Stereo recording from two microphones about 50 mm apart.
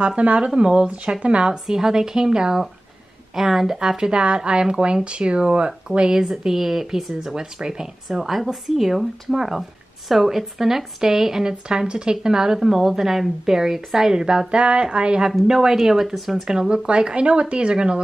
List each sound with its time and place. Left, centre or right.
0.0 s speech: right; by 16.4 s centre
16.4 s speech: centre